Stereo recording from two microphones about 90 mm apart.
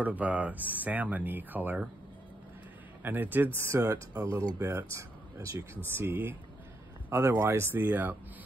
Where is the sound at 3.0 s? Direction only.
20° right (ahead or behind).